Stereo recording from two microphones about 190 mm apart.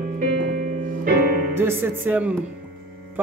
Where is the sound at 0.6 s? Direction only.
45° right (ahead or behind).